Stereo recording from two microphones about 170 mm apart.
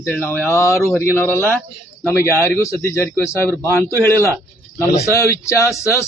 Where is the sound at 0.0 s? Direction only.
10° left (ahead or behind).